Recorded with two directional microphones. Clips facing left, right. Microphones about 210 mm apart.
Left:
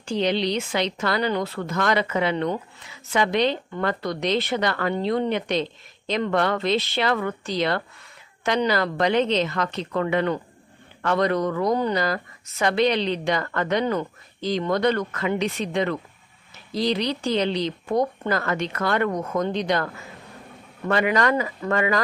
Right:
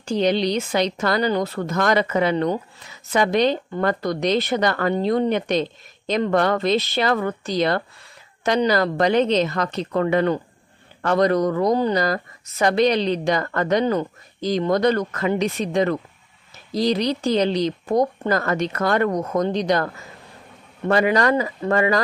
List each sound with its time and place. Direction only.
0.0 s speech: 40° right (ahead or behind)